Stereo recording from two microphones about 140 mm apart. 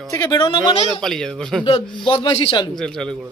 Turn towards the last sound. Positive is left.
turn(degrees=5)  # may be behind; listen again after turning